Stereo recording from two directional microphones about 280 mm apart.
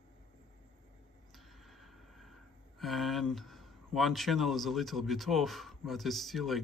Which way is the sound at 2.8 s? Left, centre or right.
Centre.